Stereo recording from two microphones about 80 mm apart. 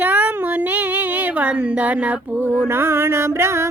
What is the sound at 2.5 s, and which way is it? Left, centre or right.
Music, right.